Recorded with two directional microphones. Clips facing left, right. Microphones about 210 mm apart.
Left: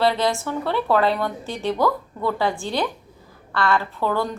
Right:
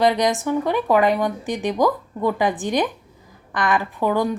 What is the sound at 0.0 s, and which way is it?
Speech, 15° right (ahead or behind).